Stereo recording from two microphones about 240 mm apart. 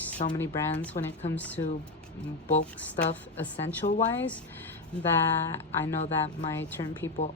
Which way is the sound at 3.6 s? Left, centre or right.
Left.